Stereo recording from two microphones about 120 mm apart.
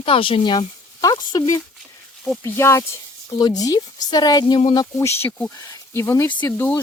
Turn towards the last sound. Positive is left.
turn(degrees=15)  # may be behind; listen again after turning